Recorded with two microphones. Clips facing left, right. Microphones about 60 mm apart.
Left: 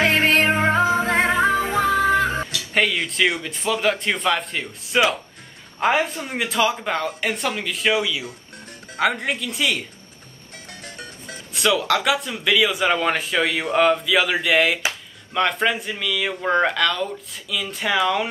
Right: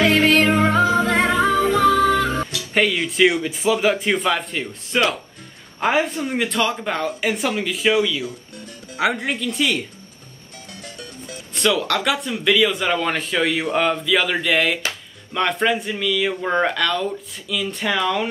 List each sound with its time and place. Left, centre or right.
0.0 s music: left
2.4 s speech: centre
10.7 s music: left
11.5 s speech: centre